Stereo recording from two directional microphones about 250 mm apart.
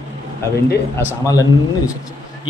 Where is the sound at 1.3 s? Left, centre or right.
Centre.